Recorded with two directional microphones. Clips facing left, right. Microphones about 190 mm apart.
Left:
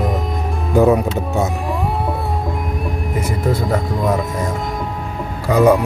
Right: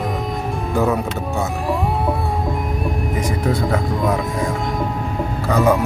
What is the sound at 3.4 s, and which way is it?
Speech, centre (ahead or behind).